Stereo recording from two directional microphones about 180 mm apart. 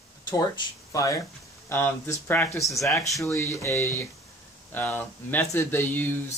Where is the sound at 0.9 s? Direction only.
20° left (ahead or behind).